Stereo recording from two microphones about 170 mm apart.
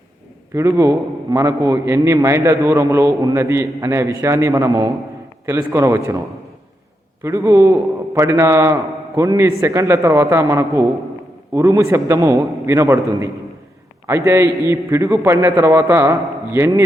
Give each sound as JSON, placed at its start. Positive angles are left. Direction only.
{"t": 0.5, "sound": "a man's voice", "side_deg": -15}
{"t": 7.2, "sound": "a man's voice", "side_deg": -15}
{"t": 14.1, "sound": "a man's voice", "side_deg": -15}